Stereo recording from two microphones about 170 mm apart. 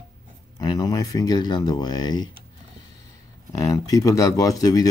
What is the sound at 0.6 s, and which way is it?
Speech, 25° left (ahead or behind).